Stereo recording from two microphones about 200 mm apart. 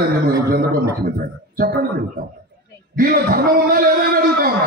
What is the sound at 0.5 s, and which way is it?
Speech, 50° right (ahead or behind).